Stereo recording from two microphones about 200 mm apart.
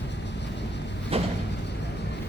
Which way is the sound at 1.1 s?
30° right (ahead or behind).